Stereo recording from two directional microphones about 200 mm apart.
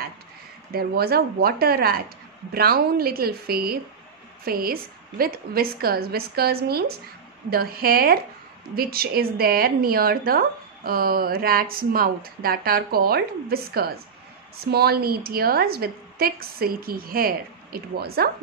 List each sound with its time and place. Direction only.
0.7 s a woman's voice: 50° right (ahead or behind)